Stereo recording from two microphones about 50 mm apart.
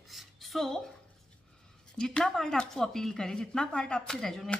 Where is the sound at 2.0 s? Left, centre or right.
Centre.